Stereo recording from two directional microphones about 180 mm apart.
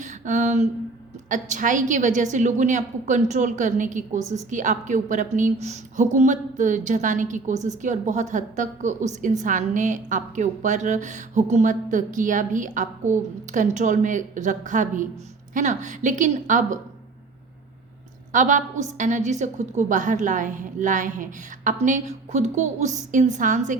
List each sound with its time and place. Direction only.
0.0 s a sound: 40° right (ahead or behind)
1.3 s a woman's voice: 45° right (ahead or behind)
18.3 s a woman's voice: 45° right (ahead or behind)